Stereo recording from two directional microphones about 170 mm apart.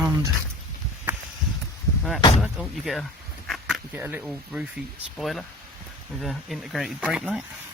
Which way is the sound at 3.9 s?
10° right (ahead or behind).